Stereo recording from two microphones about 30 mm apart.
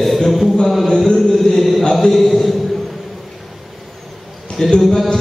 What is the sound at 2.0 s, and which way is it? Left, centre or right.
Speech, centre.